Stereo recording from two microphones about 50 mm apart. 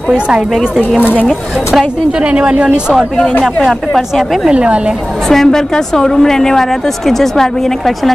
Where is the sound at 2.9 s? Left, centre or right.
Centre.